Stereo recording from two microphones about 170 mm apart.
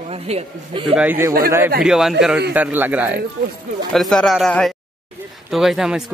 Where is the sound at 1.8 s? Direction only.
Centre (ahead or behind).